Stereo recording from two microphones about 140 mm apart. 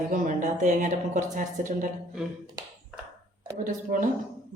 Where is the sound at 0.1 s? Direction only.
65° right (ahead or behind).